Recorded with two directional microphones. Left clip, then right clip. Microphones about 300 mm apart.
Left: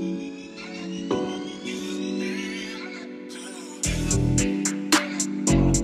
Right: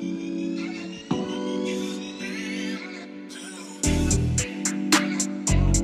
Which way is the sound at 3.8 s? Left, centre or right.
Centre.